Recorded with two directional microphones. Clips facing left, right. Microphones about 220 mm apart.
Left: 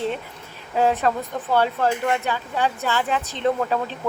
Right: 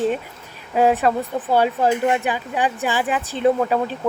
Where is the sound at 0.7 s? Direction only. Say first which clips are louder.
Right 3 dB; 15° right (ahead or behind).